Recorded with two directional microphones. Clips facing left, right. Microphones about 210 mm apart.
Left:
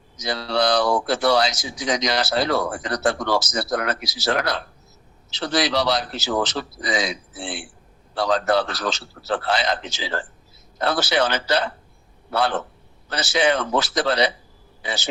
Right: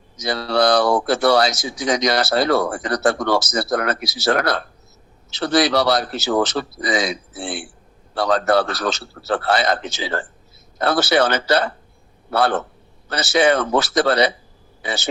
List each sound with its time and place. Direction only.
0.2 s speech: 50° right (ahead or behind)